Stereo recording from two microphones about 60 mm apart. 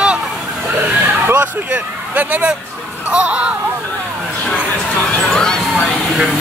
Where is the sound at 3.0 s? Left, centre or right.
Centre.